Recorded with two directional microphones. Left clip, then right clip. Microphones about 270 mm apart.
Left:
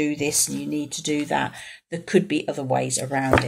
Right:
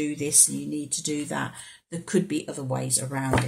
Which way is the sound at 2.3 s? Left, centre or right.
Centre.